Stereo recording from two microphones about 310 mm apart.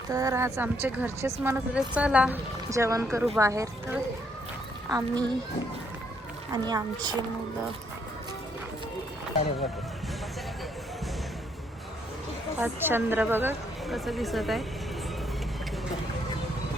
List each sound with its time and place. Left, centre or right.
0.1 s speech: centre
6.5 s speech: centre
12.5 s a woman's voice: centre